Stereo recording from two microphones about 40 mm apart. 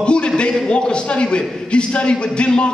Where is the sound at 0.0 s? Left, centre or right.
Left.